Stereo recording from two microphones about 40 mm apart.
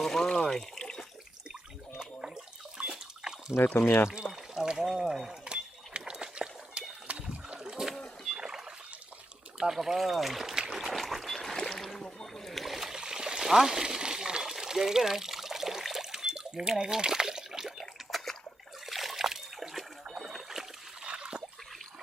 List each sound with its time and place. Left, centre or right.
0.0 s water: centre
2.0 s bathtub: centre
3.8 s speech: left
4.3 s a sound: centre
7.1 s boat: right
8.4 s rowboat: centre
9.6 s speech: centre
10.7 s a sound: centre
12.2 s splash: centre
14.6 s water: centre
18.9 s splash: centre
20.1 s a sound: centre
21.0 s water: right